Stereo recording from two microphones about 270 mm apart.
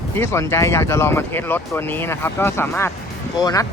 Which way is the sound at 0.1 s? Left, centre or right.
Centre.